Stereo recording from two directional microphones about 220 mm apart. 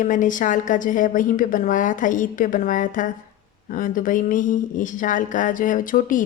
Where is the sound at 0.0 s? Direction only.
35° left (ahead or behind).